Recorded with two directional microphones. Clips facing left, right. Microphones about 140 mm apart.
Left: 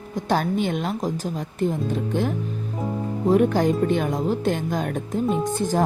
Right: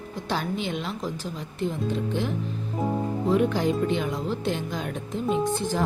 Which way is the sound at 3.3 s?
45° left (ahead or behind).